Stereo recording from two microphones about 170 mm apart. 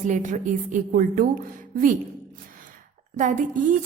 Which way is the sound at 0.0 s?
50° right (ahead or behind).